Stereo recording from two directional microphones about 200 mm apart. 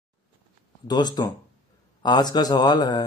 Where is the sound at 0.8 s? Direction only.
20° left (ahead or behind).